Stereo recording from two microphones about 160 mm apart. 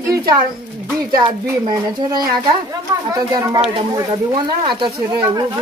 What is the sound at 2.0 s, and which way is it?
Speech, 25° right (ahead or behind).